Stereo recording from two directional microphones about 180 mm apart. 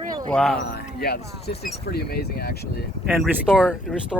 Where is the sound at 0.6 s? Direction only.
65° left (ahead or behind).